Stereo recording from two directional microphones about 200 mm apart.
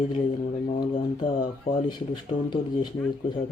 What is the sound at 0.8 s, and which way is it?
Speech, 25° left (ahead or behind).